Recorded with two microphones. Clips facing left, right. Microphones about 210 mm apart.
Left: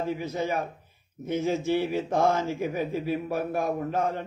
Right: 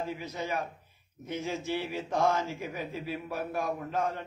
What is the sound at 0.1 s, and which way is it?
Speech, 50° left (ahead or behind).